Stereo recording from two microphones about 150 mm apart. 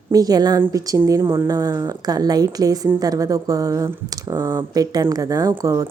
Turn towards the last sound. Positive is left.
turn(degrees=-25)  # may be behind; listen again after turning